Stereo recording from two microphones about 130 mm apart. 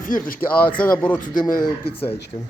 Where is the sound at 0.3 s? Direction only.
10° left (ahead or behind).